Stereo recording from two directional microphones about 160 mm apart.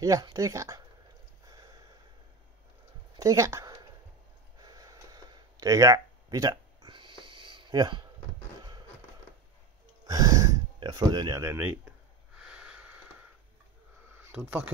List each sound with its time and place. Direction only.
0.0 s speech: 25° right (ahead or behind)
3.2 s a sound: 20° right (ahead or behind)
10.0 s speech: 20° right (ahead or behind)
12.4 s sniff: 5° right (ahead or behind)
14.3 s speech: 10° right (ahead or behind)